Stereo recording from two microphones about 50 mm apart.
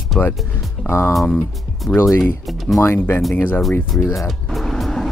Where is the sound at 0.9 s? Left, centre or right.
Left.